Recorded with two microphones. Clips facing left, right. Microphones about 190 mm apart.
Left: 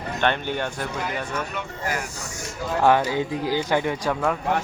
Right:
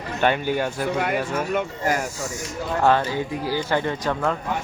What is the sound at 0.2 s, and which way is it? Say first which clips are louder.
Speech: right 3 dB; 5° right (ahead or behind).